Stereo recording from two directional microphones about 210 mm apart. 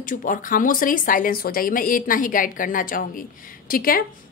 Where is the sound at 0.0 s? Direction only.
40° left (ahead or behind).